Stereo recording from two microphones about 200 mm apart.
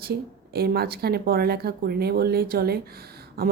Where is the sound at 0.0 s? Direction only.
50° right (ahead or behind).